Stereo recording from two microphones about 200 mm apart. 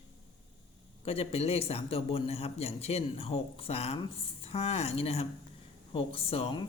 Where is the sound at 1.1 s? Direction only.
30° left (ahead or behind).